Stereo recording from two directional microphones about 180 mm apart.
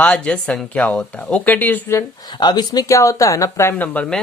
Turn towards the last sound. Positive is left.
turn(degrees=5)  # may be behind; listen again after turning